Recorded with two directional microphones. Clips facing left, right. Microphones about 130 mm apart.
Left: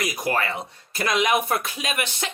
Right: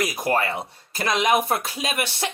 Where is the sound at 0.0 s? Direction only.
30° right (ahead or behind).